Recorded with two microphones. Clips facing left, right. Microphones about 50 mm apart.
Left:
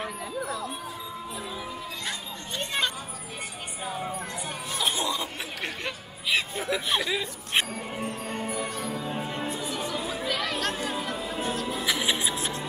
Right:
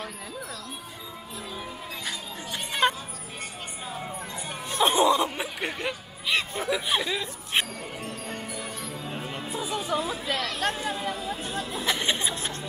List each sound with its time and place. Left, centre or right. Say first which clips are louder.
0.0 s music: left 4 dB; centre
2.8 s music: right 10 dB; right
3.8 s music: left 4 dB; centre
4.6 s music: right 6 dB; right
4.9 s music: right 8 dB; centre
5.6 s music: right 1 dB; centre
9.5 s music: right 1 dB; centre
9.9 s chatter: right 2 dB; centre
10.3 s chatter: left 1 dB; centre
10.6 s chatter: right 1 dB; centre
11.7 s music: right 2 dB; centre